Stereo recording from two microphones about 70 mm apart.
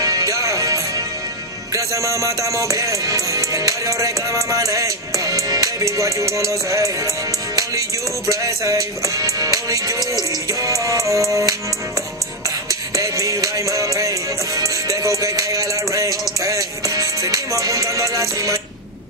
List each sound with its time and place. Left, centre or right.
0.0 s music: right
8.3 s music: right